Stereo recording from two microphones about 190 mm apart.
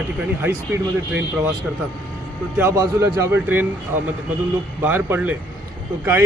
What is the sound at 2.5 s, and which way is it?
A man's voice, 15° right (ahead or behind).